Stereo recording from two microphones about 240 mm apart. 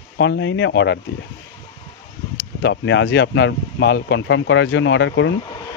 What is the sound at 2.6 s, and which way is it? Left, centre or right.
Speech, left.